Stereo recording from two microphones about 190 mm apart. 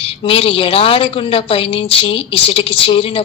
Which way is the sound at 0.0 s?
30° left (ahead or behind).